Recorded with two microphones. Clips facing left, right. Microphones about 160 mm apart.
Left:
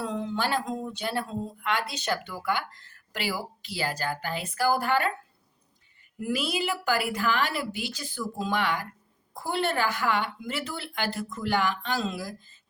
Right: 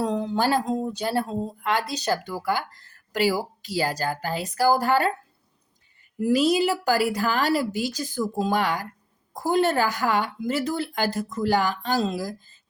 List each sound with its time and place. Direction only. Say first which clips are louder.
0.0 s speech: right 6 dB; 40° right (ahead or behind)
6.1 s speech: right 9 dB; 35° right (ahead or behind)